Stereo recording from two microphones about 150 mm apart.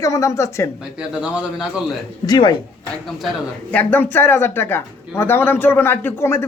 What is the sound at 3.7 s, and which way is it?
Speech, 10° left (ahead or behind).